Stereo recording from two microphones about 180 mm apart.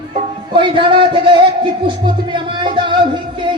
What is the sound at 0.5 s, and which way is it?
Speech, 25° right (ahead or behind).